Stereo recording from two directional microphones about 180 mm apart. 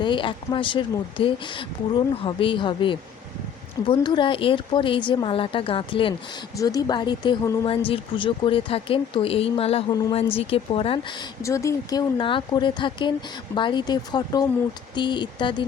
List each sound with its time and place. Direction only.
0.0 s speech: 25° left (ahead or behind)